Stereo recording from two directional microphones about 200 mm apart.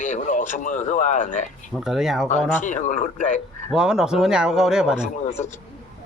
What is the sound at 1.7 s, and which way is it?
Speech, centre (ahead or behind).